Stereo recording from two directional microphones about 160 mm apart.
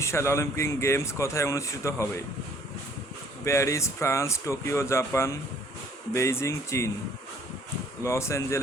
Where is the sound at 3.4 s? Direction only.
20° left (ahead or behind).